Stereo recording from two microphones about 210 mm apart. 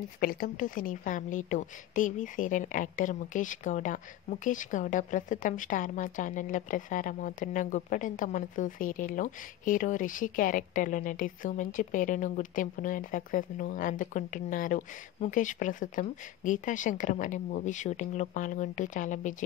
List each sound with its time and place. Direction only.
0.2 s a woman's voice: 45° left (ahead or behind)